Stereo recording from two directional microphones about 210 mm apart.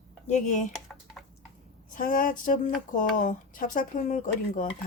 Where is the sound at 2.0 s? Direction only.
40° left (ahead or behind).